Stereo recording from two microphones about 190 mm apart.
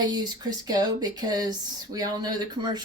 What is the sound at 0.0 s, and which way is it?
Speech, 20° right (ahead or behind).